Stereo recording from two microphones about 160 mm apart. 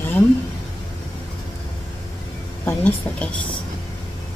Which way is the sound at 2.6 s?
10° left (ahead or behind).